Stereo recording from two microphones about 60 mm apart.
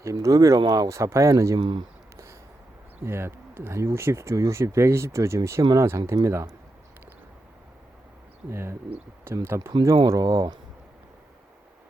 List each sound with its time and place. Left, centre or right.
0.0 s speech: right
0.9 s speech: right
3.0 s speech: right
8.4 s speech: right
9.8 s speech: right